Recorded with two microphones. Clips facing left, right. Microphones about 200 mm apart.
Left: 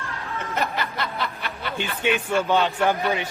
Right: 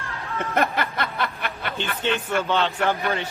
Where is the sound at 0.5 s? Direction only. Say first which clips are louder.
Right 4 dB; 55° right (ahead or behind).